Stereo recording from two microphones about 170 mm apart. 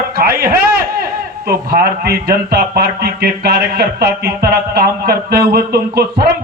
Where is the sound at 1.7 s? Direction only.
65° right (ahead or behind).